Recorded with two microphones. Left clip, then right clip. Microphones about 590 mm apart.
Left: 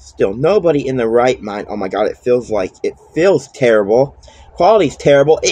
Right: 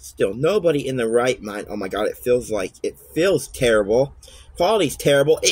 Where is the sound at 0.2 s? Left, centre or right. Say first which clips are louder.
Left 6 dB; right.